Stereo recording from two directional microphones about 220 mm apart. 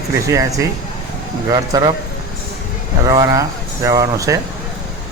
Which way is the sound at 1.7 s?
15° right (ahead or behind).